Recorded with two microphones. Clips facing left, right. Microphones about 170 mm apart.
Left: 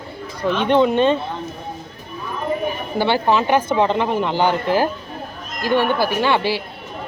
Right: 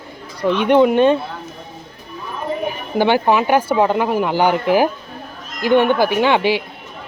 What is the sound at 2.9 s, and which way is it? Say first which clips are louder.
Speech: right 3 dB; 15° right (ahead or behind).